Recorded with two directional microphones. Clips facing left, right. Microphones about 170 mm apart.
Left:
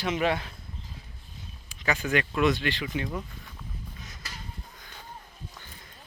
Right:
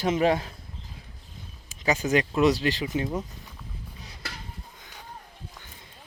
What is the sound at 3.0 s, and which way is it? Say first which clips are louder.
Speech: right 4 dB; 20° right (ahead or behind).